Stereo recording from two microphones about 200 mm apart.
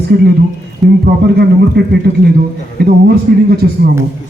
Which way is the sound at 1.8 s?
55° right (ahead or behind).